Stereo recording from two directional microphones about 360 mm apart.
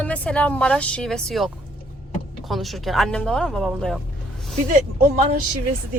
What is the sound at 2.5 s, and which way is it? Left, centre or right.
A woman's voice, centre.